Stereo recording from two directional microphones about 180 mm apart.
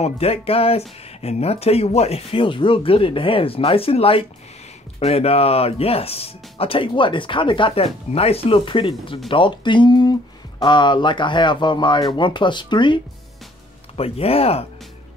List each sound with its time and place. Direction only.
0.0 s speech: 35° left (ahead or behind)